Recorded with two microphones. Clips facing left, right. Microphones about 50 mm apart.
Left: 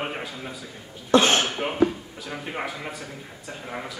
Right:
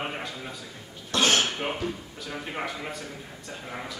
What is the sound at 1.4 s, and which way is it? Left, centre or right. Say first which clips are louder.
Cough: left 2 dB; centre.